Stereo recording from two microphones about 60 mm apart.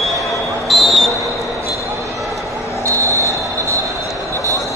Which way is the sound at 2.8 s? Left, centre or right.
Right.